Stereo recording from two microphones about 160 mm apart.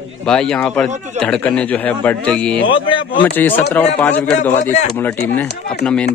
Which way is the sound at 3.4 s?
10° left (ahead or behind).